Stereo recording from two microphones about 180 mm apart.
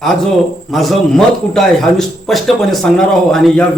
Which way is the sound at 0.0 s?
Centre (ahead or behind).